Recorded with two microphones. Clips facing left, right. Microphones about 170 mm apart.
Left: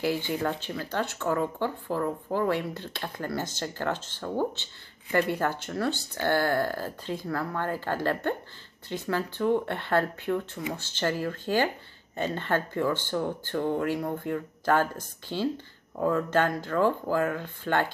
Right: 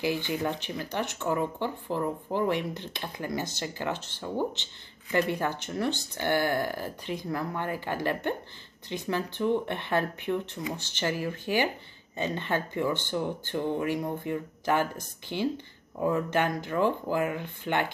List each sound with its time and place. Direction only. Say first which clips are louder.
0.4 s speech: left 1 dB; 15° right (ahead or behind)